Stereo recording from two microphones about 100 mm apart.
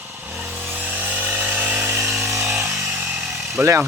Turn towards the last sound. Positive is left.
turn(degrees=-25)  # may be behind; listen again after turning